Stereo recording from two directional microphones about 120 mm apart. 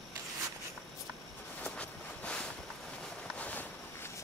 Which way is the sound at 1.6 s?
10° left (ahead or behind).